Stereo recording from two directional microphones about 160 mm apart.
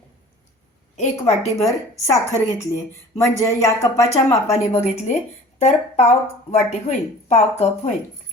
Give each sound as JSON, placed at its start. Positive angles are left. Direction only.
{"t": 0.9, "sound": "speech", "side_deg": 40}
{"t": 1.5, "sound": "a woman's voice", "side_deg": 20}
{"t": 4.8, "sound": "speech", "side_deg": 45}